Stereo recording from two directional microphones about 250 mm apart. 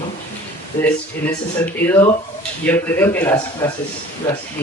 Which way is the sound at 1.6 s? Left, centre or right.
Centre.